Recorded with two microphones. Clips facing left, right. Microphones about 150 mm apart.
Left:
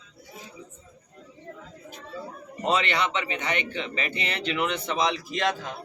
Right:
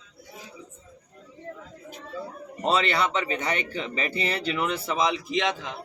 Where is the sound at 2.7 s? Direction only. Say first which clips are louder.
Right 1 dB; 35° right (ahead or behind).